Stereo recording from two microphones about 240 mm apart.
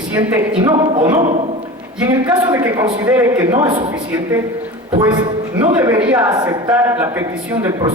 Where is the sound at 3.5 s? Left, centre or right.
Right.